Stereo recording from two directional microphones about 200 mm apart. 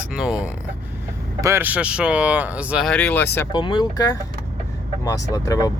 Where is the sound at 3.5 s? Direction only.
25° left (ahead or behind).